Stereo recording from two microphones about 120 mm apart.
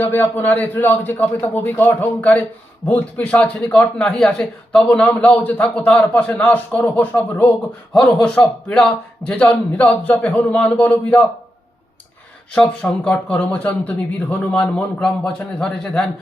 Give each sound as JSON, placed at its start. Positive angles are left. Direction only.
{"t": 0.0, "sound": "speech", "side_deg": 15}
{"t": 12.5, "sound": "speech", "side_deg": 10}